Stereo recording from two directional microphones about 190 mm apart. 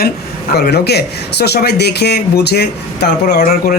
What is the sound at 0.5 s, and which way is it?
Speech, 60° left (ahead or behind).